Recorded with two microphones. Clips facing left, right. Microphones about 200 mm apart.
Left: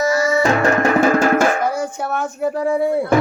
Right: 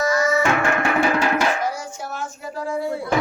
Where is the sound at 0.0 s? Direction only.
30° left (ahead or behind).